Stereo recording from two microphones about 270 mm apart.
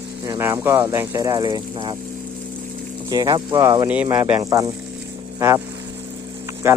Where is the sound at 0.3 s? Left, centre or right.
Centre.